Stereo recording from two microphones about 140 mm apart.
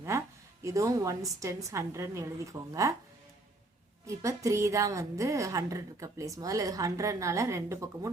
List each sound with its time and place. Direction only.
0.1 s a sound: 20° right (ahead or behind)
0.6 s a woman's voice: 25° right (ahead or behind)
4.0 s a woman's voice: 25° right (ahead or behind)